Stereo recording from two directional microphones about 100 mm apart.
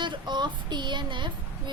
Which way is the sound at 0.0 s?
50° right (ahead or behind).